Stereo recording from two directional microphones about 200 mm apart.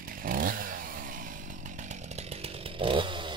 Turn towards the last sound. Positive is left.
turn(degrees=-25)  # may be behind; listen again after turning